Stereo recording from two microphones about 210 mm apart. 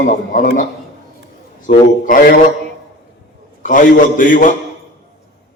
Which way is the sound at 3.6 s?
40° left (ahead or behind).